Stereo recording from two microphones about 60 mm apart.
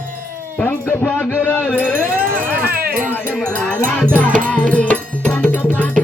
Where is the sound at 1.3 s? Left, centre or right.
Left.